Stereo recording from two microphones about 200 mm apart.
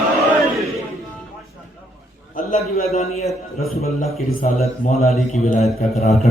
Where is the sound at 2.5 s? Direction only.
40° left (ahead or behind).